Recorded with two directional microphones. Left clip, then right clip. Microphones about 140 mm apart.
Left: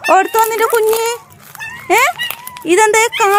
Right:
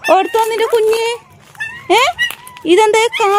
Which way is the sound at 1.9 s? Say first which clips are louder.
Even; 35° right (ahead or behind).